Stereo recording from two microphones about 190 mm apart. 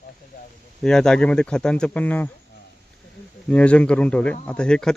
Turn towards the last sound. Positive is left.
turn(degrees=5)  # may be behind; listen again after turning